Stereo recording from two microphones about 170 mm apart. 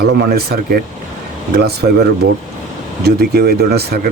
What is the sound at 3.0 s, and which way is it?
Speech, 65° right (ahead or behind).